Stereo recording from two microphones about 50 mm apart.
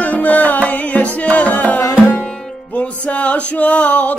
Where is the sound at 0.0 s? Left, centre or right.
Left.